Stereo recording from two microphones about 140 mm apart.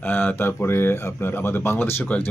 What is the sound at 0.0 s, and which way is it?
Speech, 10° left (ahead or behind).